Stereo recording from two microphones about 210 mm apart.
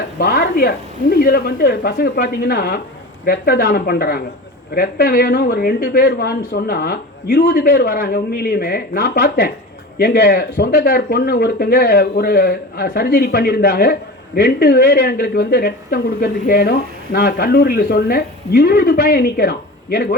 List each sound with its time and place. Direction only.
0.2 s a woman's voice: 50° left (ahead or behind)